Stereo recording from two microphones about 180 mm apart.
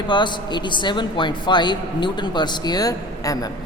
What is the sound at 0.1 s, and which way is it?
A man's voice, 25° left (ahead or behind).